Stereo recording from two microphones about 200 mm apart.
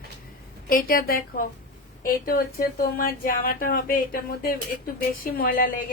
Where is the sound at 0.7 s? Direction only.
45° left (ahead or behind).